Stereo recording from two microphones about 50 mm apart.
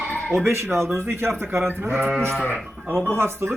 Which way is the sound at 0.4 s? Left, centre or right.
Right.